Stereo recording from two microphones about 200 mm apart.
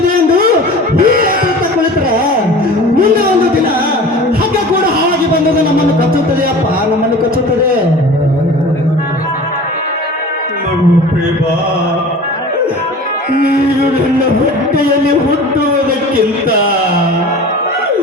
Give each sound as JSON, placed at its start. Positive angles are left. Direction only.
{"t": 0.9, "sound": "music", "side_deg": -45}